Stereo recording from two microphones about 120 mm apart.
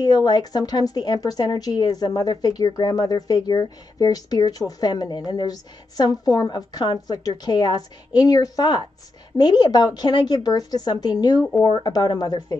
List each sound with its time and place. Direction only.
0.0 s speech: 35° left (ahead or behind)